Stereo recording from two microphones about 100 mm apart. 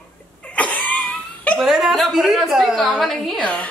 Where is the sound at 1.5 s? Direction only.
5° right (ahead or behind).